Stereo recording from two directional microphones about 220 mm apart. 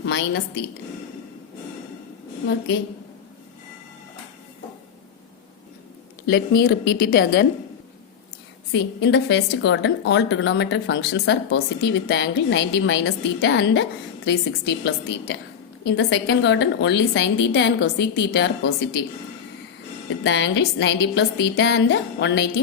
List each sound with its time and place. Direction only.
0.0 s a woman's voice: 55° left (ahead or behind)
6.2 s a woman's voice: 50° left (ahead or behind)
8.7 s a woman's voice: 55° left (ahead or behind)
20.2 s a woman's voice: 55° left (ahead or behind)